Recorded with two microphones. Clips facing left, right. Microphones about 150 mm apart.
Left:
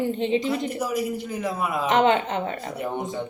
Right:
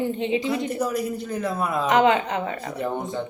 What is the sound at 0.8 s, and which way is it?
A man's voice, 10° left (ahead or behind).